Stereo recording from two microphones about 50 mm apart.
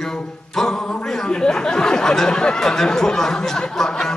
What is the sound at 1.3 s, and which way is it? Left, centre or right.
Speech, centre.